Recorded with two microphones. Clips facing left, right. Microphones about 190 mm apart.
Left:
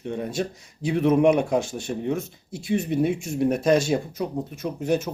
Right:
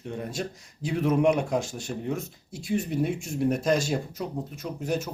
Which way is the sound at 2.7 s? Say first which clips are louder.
Left 4 dB; 70° left (ahead or behind).